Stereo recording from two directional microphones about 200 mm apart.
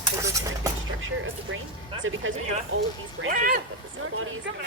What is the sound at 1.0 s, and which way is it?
Speech, 80° right.